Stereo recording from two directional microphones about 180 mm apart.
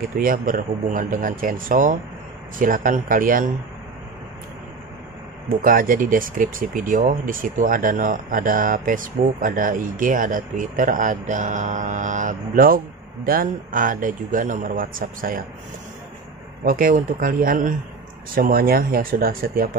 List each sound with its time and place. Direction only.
0.2 s speech: 50° right (ahead or behind)
5.6 s speech: 50° right (ahead or behind)
16.6 s speech: 50° right (ahead or behind)